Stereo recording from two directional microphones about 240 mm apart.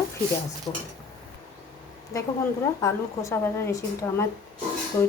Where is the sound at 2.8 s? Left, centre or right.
Centre.